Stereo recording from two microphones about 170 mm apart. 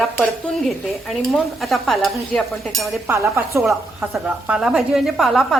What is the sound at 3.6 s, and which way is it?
Speech, 5° right (ahead or behind).